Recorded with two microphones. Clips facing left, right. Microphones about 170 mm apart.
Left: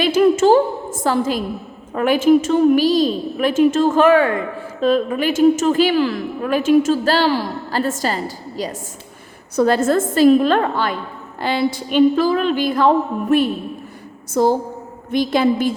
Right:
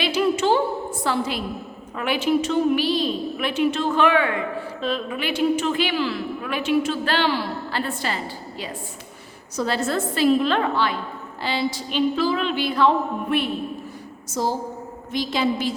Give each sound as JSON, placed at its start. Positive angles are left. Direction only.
{"t": 0.0, "sound": "a sound", "side_deg": 45}
{"t": 2.0, "sound": "a woman's voice", "side_deg": 45}
{"t": 14.4, "sound": "a woman's voice", "side_deg": 55}